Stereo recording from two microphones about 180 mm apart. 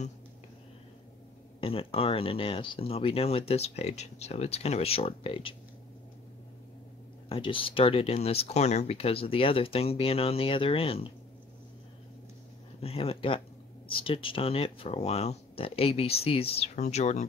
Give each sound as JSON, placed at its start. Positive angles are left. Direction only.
{"t": 1.6, "sound": "speech", "side_deg": 30}
{"t": 7.2, "sound": "speech", "side_deg": 30}
{"t": 12.8, "sound": "speech", "side_deg": 35}